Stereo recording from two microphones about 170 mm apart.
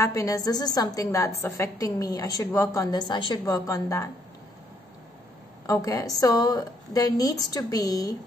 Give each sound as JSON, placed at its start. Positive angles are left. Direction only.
{"t": 0.0, "sound": "a woman's voice", "side_deg": 20}
{"t": 5.7, "sound": "a woman's voice", "side_deg": 20}